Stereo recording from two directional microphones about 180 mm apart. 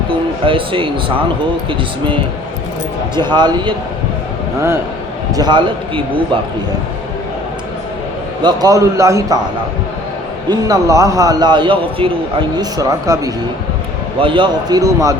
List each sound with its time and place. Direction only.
0.4 s a man's voice: 30° right (ahead or behind)
3.2 s a man's voice: 25° right (ahead or behind)
5.3 s a man's voice: 25° right (ahead or behind)
8.4 s a man's voice: 20° right (ahead or behind)
10.5 s a man's voice: 20° right (ahead or behind)